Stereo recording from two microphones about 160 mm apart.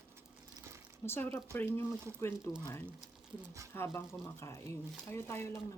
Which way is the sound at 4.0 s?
15° left (ahead or behind).